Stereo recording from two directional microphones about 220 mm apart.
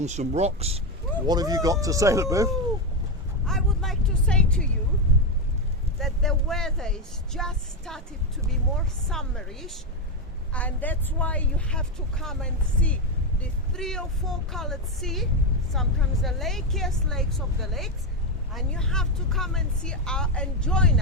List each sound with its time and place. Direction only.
0.0 s speech: 30° right (ahead or behind)
1.3 s speech: 15° right (ahead or behind)
3.4 s speech: centre (ahead or behind)
6.0 s speech: centre (ahead or behind)
9.0 s speech: centre (ahead or behind)